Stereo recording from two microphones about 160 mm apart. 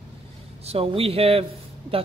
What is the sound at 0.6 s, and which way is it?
Speech, 40° right (ahead or behind).